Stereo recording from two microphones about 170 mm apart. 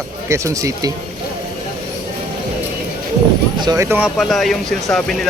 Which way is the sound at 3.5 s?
20° right (ahead or behind).